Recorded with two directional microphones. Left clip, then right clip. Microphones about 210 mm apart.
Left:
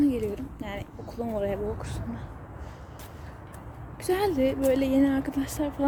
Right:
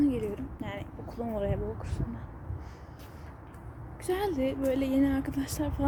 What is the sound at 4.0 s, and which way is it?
Speech, 5° left (ahead or behind).